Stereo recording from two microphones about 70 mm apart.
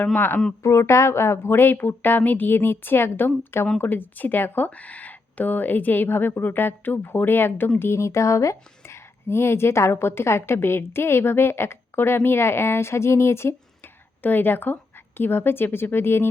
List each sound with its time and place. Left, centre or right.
0.6 s speech: left
14.2 s speech: left